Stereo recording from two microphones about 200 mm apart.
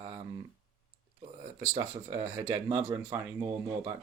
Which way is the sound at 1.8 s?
20° right (ahead or behind).